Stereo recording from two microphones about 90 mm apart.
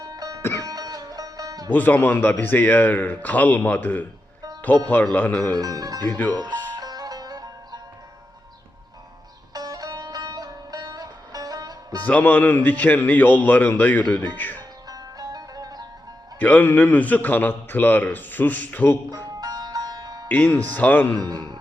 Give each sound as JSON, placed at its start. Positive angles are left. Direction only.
{"t": 0.0, "sound": "music", "side_deg": -45}
{"t": 1.7, "sound": "a man's voice", "side_deg": 20}
{"t": 5.1, "sound": "speech", "side_deg": 15}
{"t": 5.5, "sound": "speech", "side_deg": -45}
{"t": 6.1, "sound": "a man's voice", "side_deg": 20}
{"t": 6.3, "sound": "speech", "side_deg": -50}
{"t": 6.7, "sound": "music", "side_deg": -45}
{"t": 9.5, "sound": "music", "side_deg": -45}
{"t": 12.0, "sound": "a man's voice", "side_deg": 15}
{"t": 14.8, "sound": "music", "side_deg": -45}
{"t": 16.4, "sound": "a man's voice", "side_deg": 15}
{"t": 19.1, "sound": "music", "side_deg": -45}
{"t": 20.2, "sound": "speech", "side_deg": 20}
{"t": 21.2, "sound": "speech", "side_deg": -45}